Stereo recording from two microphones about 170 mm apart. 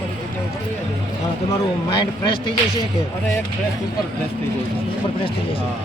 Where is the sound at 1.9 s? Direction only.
30° left (ahead or behind).